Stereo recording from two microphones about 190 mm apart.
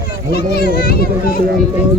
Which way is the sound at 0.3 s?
55° left (ahead or behind).